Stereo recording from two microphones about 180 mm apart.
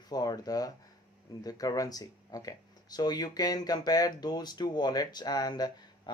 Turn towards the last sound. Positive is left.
turn(degrees=20)  # may be behind; listen again after turning